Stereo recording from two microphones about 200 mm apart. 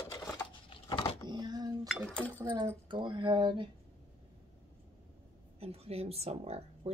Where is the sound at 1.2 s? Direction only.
20° right (ahead or behind).